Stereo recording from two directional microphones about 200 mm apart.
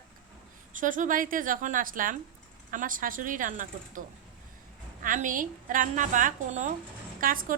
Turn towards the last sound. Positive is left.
turn(degrees=-45)  # may be behind; listen again after turning